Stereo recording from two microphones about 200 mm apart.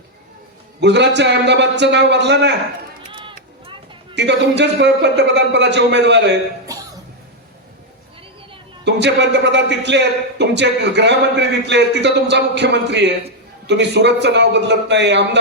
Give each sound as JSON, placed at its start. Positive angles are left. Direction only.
{"t": 0.8, "sound": "a man's voice", "side_deg": -60}
{"t": 3.1, "sound": "run", "side_deg": -25}
{"t": 4.1, "sound": "a man's voice", "side_deg": -60}
{"t": 6.7, "sound": "cough", "side_deg": -20}
{"t": 8.8, "sound": "a man's voice", "side_deg": -60}